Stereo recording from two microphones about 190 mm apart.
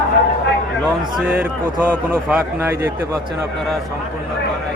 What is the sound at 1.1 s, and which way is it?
Speech, 10° right (ahead or behind).